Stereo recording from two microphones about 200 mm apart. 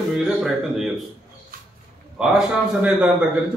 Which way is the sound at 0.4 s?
Centre (ahead or behind).